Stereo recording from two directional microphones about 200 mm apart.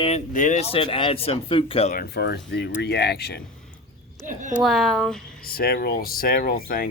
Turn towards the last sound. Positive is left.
turn(degrees=45)  # may be behind; listen again after turning